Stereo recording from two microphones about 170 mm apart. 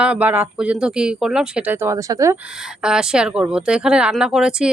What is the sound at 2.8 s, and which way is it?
Speech, 5° right (ahead or behind).